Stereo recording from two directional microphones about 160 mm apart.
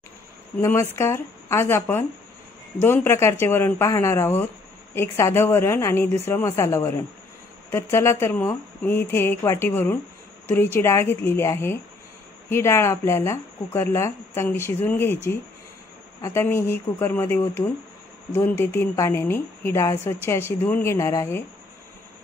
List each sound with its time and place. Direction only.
0.6 s speech: 15° left (ahead or behind)
16.2 s speech: 15° left (ahead or behind)